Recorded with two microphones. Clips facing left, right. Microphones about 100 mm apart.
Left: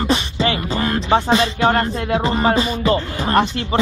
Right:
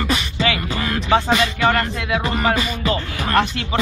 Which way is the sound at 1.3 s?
30° left (ahead or behind).